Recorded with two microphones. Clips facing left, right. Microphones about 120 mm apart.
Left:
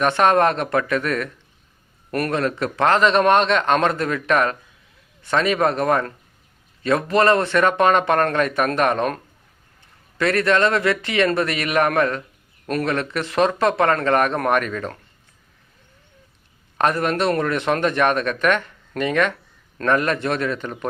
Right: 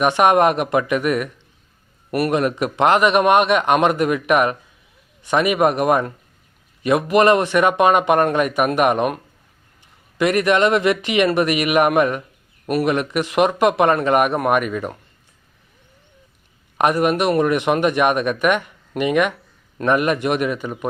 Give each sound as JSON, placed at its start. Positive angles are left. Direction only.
{"t": 0.0, "sound": "speech", "side_deg": -15}
{"t": 16.7, "sound": "speech", "side_deg": -15}